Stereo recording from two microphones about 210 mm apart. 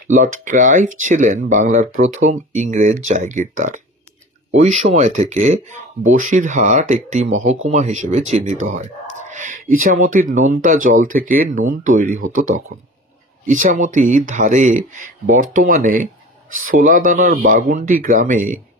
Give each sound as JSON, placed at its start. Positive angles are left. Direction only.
{"t": 0.1, "sound": "speech", "side_deg": -35}
{"t": 13.5, "sound": "speech", "side_deg": -40}